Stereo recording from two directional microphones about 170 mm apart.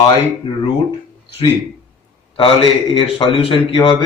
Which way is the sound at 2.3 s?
35° left (ahead or behind).